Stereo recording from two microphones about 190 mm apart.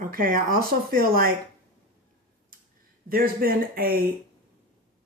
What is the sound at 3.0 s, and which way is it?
Speech, 50° right (ahead or behind).